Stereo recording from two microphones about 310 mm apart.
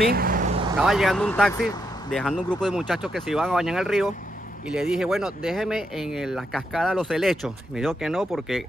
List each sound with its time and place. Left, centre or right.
0.0 s vehicle: right
0.7 s speech: centre